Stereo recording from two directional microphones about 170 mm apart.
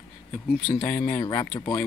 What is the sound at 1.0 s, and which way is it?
Speech, 25° left (ahead or behind).